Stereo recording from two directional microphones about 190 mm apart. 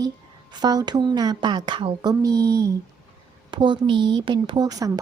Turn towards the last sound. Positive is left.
turn(degrees=-20)  # may be behind; listen again after turning